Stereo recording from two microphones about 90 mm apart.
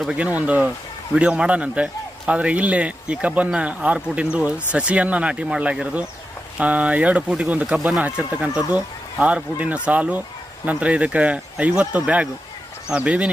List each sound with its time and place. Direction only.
0.0 s a man's voice: 10° right (ahead or behind)
8.0 s a man's voice: 15° right (ahead or behind)